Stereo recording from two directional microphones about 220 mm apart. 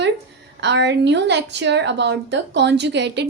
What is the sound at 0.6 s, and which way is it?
Speech, 50° right (ahead or behind).